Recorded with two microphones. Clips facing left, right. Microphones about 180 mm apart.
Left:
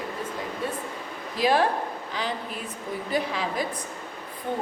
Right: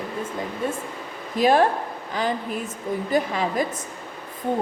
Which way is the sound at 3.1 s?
45° right (ahead or behind).